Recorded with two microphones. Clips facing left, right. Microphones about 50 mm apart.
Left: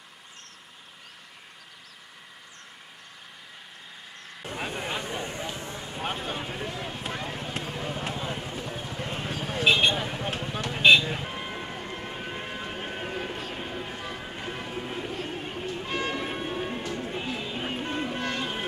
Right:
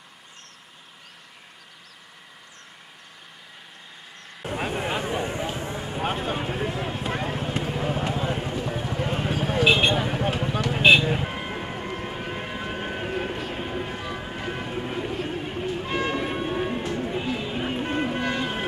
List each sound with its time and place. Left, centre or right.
4.4 s vehicle: centre
7.1 s run: right
8.1 s a sound: centre
10.0 s vehicle: centre
16.5 s music: centre
17.6 s a sound: centre
18.0 s vehicle: centre